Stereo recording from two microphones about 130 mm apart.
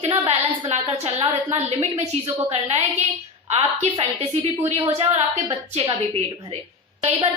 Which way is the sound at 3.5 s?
50° right (ahead or behind).